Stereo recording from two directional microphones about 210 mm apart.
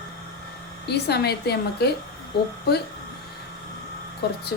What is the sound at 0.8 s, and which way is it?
Speech, 50° left (ahead or behind).